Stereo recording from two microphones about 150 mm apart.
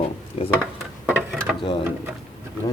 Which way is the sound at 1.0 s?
5° right (ahead or behind).